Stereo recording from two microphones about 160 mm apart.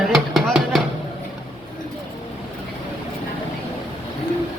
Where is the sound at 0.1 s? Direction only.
Centre (ahead or behind).